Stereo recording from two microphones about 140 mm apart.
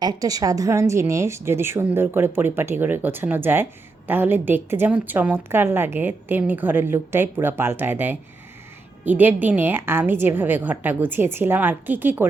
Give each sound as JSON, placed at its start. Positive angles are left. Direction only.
{"t": 0.0, "sound": "speech", "side_deg": -25}